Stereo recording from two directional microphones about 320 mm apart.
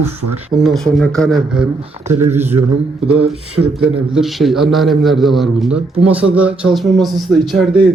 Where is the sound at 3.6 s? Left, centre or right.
Right.